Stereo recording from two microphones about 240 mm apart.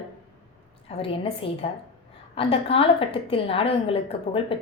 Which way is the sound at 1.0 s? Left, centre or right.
Left.